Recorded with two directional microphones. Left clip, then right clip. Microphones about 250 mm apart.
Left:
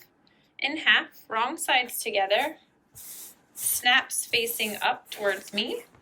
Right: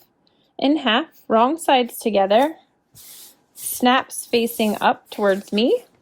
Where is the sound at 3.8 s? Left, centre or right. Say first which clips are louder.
Right 5 dB; centre.